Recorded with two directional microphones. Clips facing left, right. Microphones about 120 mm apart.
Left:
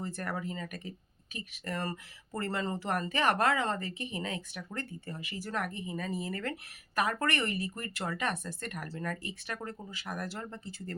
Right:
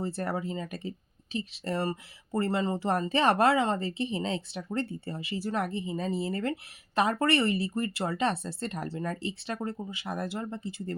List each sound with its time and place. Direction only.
0.0 s speech: 30° right (ahead or behind)